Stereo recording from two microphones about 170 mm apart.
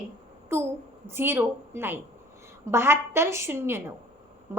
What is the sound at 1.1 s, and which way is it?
A woman's voice, 15° right (ahead or behind).